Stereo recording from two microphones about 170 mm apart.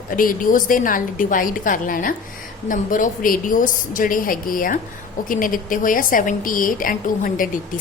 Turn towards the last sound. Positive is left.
turn(degrees=55)  # may be behind; listen again after turning